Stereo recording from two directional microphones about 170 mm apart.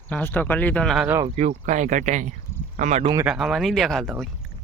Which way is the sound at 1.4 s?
45° right (ahead or behind).